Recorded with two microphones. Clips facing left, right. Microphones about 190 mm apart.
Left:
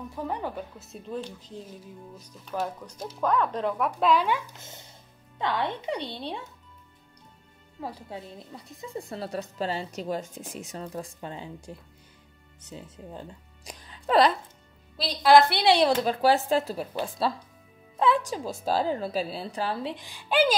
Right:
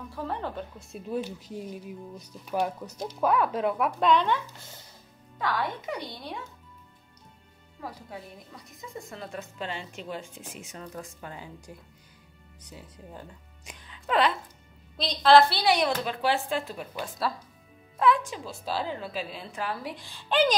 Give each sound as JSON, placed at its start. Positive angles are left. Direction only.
{"t": 0.1, "sound": "speech", "side_deg": 15}
{"t": 1.0, "sound": "speech", "side_deg": -10}
{"t": 4.1, "sound": "speech", "side_deg": 5}
{"t": 4.6, "sound": "speech", "side_deg": 20}
{"t": 7.8, "sound": "speech", "side_deg": 25}
{"t": 15.0, "sound": "speech", "side_deg": 10}
{"t": 15.5, "sound": "speech", "side_deg": 30}
{"t": 16.0, "sound": "speech", "side_deg": 40}